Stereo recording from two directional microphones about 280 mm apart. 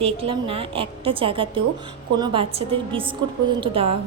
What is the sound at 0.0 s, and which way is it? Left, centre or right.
A woman's voice, centre.